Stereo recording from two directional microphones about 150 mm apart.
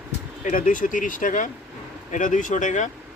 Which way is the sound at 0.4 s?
65° left (ahead or behind).